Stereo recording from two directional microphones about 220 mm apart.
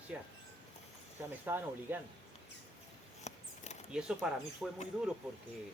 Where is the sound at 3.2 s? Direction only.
30° left (ahead or behind).